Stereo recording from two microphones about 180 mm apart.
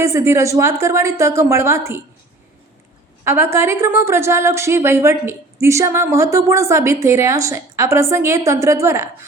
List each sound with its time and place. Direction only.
0.0 s a woman's voice: 15° right (ahead or behind)
3.2 s a woman's voice: 15° right (ahead or behind)